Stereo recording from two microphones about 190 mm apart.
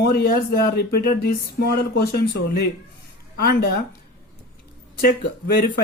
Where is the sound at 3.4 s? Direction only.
55° left (ahead or behind).